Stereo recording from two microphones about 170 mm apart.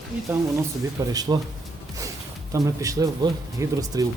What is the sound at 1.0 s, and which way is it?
Speech, 20° right (ahead or behind).